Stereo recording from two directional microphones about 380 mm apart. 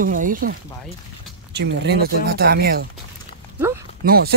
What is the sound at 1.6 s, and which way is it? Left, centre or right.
Speech, right.